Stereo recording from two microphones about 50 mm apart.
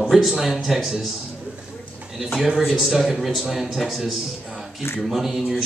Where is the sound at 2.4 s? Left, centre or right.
Centre.